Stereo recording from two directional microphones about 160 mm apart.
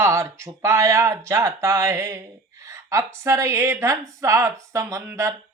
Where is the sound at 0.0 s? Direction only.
15° right (ahead or behind).